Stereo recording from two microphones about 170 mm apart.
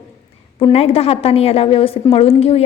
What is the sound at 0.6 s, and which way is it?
A woman's voice, 35° left (ahead or behind).